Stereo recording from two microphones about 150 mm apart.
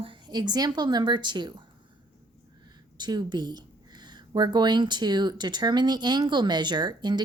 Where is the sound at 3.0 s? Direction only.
30° right (ahead or behind).